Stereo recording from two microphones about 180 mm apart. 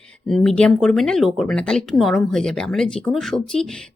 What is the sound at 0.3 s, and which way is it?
Speech, 5° left (ahead or behind).